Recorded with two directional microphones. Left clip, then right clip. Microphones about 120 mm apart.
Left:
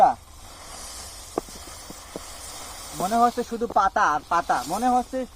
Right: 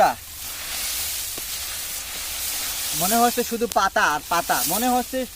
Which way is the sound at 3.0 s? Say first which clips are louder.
Right 1 dB; 55° right (ahead or behind).